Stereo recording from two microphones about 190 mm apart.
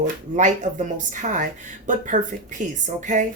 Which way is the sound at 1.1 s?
40° right (ahead or behind).